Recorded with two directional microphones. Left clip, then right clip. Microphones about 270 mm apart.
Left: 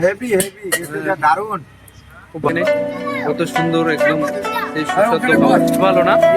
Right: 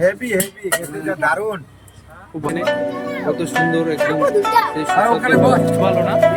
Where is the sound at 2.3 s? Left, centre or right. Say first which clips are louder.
Left 3 dB; centre.